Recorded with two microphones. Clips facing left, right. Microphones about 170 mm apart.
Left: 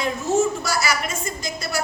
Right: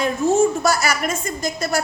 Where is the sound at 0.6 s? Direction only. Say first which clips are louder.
Right 5 dB; 50° right (ahead or behind).